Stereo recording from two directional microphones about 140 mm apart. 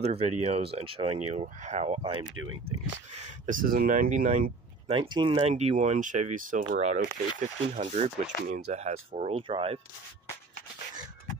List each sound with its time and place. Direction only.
0.0 s speech: 45° right (ahead or behind)
3.4 s speech: 80° right
4.8 s speech: 35° right (ahead or behind)
5.5 s speech: 50° right (ahead or behind)